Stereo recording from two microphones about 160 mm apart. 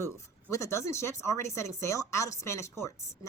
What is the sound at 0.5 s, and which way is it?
A woman's voice, 20° left (ahead or behind).